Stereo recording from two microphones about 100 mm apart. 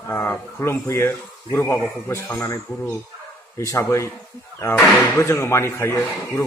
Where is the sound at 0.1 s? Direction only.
25° left (ahead or behind).